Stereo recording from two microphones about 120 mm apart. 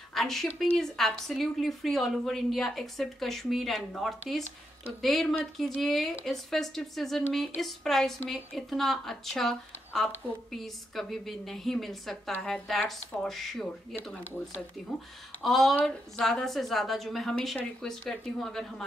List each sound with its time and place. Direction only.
0.1 s a woman's voice: 5° left (ahead or behind)